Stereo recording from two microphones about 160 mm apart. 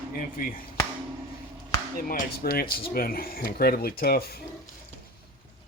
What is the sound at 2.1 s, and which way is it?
Speech, 65° left (ahead or behind).